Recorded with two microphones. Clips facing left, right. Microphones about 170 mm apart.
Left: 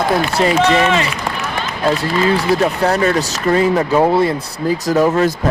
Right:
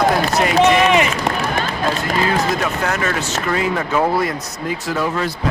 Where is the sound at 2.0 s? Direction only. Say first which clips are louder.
Left 3 dB; 30° left (ahead or behind).